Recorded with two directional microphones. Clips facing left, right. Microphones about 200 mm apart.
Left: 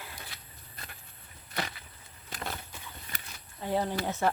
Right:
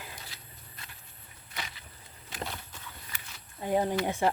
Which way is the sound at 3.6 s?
15° right (ahead or behind).